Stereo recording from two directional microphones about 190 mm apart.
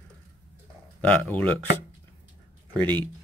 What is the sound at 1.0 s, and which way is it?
Speech, 10° left (ahead or behind).